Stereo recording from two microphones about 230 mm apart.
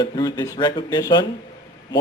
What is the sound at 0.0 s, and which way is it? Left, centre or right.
Speech, centre.